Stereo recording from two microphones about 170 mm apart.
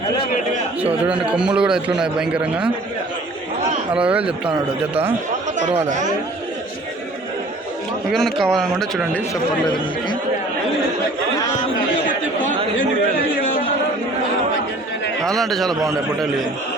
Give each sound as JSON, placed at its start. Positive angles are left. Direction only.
{"t": 1.0, "sound": "a man's voice", "side_deg": -5}
{"t": 4.0, "sound": "speech", "side_deg": -5}
{"t": 8.1, "sound": "a man's voice", "side_deg": 0}
{"t": 15.2, "sound": "a man's voice", "side_deg": 0}
{"t": 15.7, "sound": "a man's voice", "side_deg": -20}